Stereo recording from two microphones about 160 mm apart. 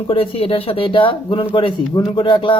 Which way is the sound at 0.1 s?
35° left (ahead or behind).